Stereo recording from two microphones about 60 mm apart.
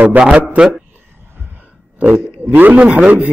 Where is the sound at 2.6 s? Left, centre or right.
Right.